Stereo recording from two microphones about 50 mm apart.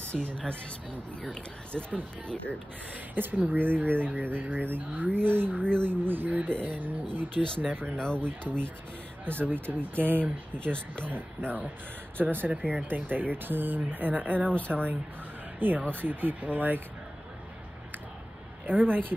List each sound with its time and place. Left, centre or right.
0.1 s speech: left
3.2 s speech: right
8.0 s speech: centre
9.2 s speech: right
10.5 s speech: centre
11.1 s speech: right
18.7 s speech: right